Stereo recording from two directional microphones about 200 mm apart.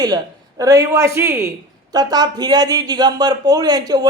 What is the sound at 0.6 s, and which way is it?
A woman's voice, 15° right (ahead or behind).